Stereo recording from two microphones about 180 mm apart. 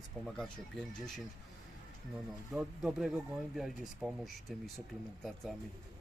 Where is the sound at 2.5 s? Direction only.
5° right (ahead or behind).